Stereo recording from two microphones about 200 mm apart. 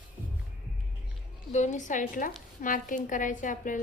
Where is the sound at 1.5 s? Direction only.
35° left (ahead or behind).